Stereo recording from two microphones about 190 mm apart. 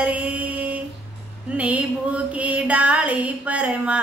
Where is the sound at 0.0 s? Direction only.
5° right (ahead or behind).